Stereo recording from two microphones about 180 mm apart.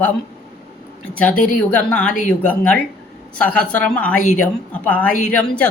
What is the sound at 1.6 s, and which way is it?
A man's voice, 5° left (ahead or behind).